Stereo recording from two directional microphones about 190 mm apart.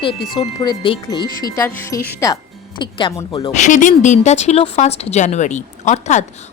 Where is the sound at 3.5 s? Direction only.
40° left (ahead or behind).